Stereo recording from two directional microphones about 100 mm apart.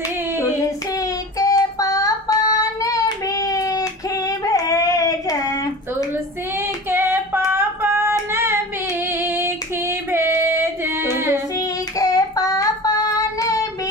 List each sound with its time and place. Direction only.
0.9 s child singing: 35° left (ahead or behind)
6.6 s child singing: 20° right (ahead or behind)
11.5 s child singing: 35° left (ahead or behind)